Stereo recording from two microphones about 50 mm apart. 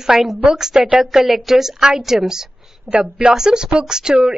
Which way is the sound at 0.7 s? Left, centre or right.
Right.